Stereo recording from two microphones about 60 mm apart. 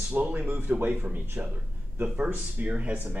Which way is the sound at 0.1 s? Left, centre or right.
Right.